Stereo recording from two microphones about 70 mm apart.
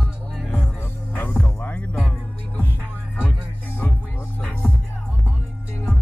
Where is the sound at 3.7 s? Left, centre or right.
Left.